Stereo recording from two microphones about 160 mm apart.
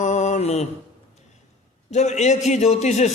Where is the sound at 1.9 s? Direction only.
45° left (ahead or behind).